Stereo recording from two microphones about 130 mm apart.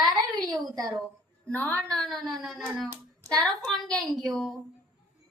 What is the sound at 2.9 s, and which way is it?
Hands, 30° right (ahead or behind).